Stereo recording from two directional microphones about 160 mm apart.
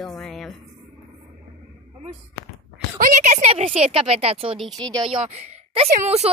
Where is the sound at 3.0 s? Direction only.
50° right (ahead or behind).